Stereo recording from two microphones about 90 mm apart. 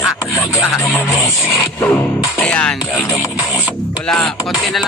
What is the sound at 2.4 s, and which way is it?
Speech, 10° left (ahead or behind).